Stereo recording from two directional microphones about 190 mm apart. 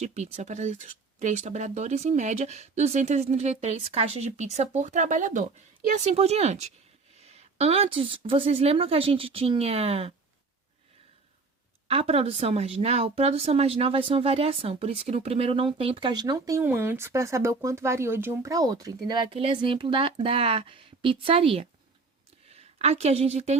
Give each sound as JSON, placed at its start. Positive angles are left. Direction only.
{"t": 0.0, "sound": "speech", "side_deg": -35}
{"t": 11.9, "sound": "a woman's voice", "side_deg": -30}